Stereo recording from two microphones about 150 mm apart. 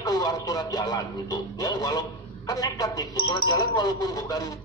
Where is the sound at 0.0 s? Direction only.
25° left (ahead or behind).